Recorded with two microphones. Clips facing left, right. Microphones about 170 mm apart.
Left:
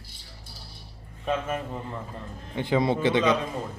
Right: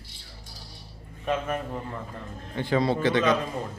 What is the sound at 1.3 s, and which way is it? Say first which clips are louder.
Speech: even; 5° left (ahead or behind).